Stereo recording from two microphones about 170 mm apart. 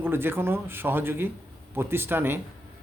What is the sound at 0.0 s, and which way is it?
A man's voice, 15° right (ahead or behind).